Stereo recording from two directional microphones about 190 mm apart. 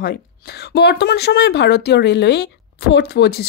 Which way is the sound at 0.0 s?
55° left (ahead or behind).